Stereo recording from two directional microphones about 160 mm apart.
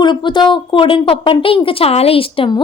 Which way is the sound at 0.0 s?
30° left (ahead or behind).